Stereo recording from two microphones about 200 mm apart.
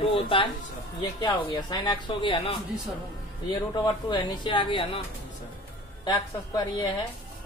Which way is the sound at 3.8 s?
20° left (ahead or behind).